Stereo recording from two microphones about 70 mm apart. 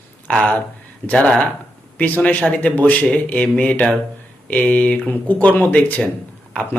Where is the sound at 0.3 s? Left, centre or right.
Centre.